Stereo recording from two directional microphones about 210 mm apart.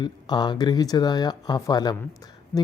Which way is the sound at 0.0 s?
20° left (ahead or behind).